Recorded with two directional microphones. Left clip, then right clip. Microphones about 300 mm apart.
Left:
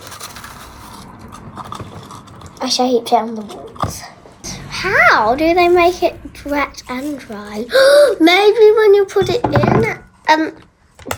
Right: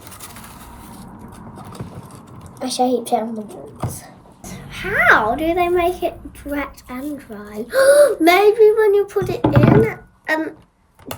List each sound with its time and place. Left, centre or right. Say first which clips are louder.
2.6 s a woman's voice: left 4 dB; centre